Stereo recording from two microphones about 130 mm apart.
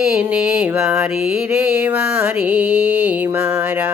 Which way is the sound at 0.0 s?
10° right (ahead or behind).